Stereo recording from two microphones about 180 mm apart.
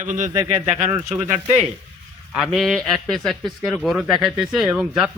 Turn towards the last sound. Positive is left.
turn(degrees=-5)  # may be behind; listen again after turning